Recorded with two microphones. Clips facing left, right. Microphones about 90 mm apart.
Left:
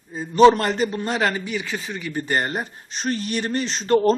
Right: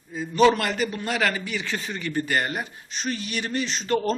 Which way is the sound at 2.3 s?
30° left (ahead or behind).